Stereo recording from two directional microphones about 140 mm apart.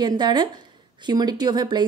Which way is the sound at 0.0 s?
30° right (ahead or behind).